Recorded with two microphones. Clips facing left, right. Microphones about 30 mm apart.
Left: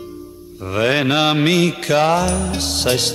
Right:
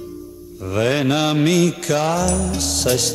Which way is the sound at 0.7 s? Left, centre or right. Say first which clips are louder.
Left 2 dB; left.